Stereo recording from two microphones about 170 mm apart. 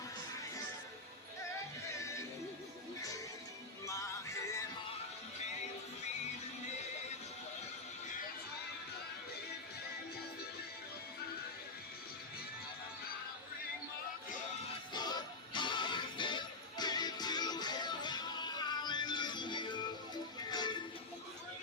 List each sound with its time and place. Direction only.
14.9 s music: 25° left (ahead or behind)